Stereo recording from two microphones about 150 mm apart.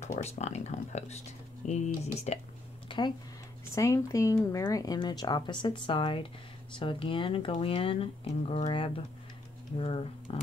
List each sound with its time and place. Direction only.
0.0 s speech: 50° left (ahead or behind)
2.9 s a sound: 30° left (ahead or behind)
3.7 s speech: 20° left (ahead or behind); by 10.3 s 35° left (ahead or behind)